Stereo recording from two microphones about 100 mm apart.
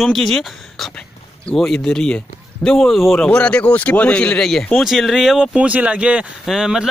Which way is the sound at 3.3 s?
10° left (ahead or behind).